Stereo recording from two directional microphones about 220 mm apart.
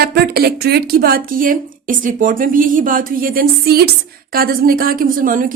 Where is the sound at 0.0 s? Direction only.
45° right (ahead or behind).